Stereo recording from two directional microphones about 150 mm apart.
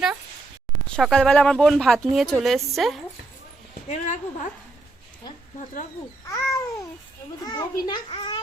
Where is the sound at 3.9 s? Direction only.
55° left (ahead or behind).